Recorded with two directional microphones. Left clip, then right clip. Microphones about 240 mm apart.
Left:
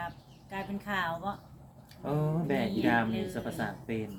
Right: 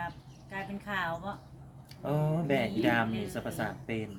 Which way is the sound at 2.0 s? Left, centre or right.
Right.